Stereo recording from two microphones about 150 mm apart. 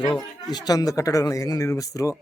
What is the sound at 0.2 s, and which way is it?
Speech, 25° left (ahead or behind).